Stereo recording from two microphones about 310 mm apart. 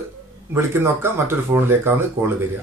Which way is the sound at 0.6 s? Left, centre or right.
Centre.